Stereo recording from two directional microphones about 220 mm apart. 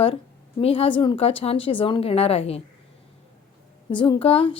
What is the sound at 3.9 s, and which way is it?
Speech, 20° left (ahead or behind).